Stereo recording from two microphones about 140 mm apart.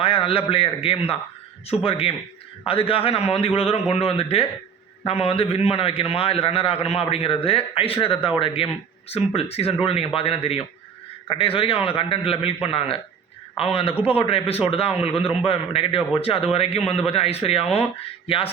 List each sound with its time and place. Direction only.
0.0 s a man's voice: 40° left (ahead or behind)